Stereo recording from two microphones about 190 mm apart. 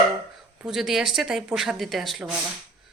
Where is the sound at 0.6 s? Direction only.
Centre (ahead or behind).